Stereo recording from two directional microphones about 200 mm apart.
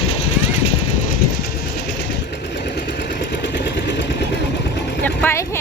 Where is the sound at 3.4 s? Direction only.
60° left (ahead or behind).